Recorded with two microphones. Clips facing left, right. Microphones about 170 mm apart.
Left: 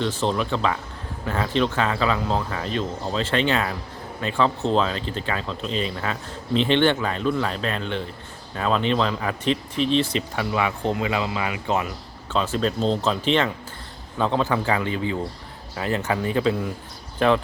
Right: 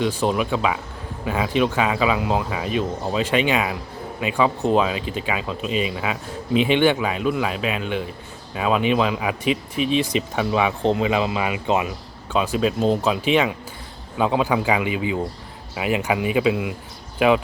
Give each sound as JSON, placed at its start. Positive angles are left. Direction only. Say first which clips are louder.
{"t": 0.0, "sound": "speech", "louder": "right 3 dB", "side_deg": -10}